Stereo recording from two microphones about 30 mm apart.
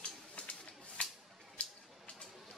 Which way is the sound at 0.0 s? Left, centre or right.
Left.